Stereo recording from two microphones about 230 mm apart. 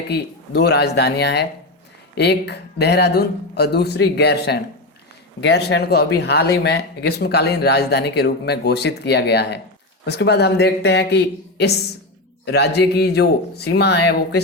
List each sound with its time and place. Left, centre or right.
0.1 s a man's voice: left